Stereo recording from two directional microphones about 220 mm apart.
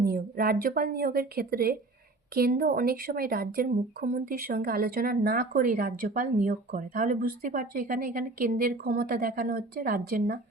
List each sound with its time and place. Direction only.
0.0 s a woman's voice: 45° right (ahead or behind)